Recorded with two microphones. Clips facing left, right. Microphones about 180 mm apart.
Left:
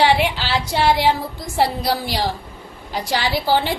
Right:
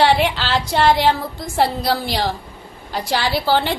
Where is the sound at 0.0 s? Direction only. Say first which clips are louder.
Right 1 dB; 10° left (ahead or behind).